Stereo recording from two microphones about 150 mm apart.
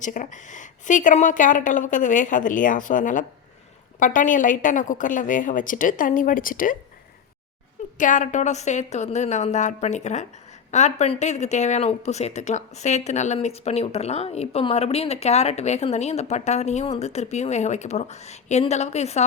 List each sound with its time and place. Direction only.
0.0 s a woman's voice: 60° left (ahead or behind)
7.9 s speech: 60° left (ahead or behind)